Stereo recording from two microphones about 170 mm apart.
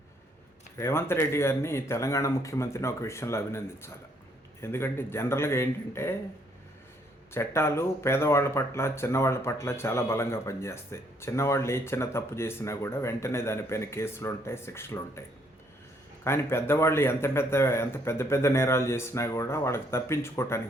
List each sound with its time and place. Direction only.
0.8 s speech: 15° left (ahead or behind)
7.3 s speech: 15° left (ahead or behind)
16.2 s speech: 15° left (ahead or behind)